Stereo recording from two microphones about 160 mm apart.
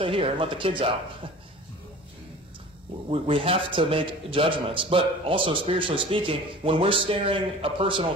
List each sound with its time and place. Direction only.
0.0 s a man's voice: 35° right (ahead or behind)
3.1 s a man's voice: 35° right (ahead or behind)